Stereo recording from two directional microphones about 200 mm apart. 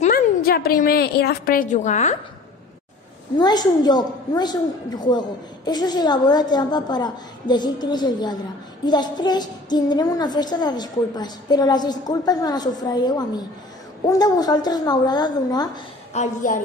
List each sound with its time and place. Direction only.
0.0 s a woman's voice: 45° left (ahead or behind)
3.3 s child singing: 20° left (ahead or behind)
16.1 s a woman's voice: 40° left (ahead or behind)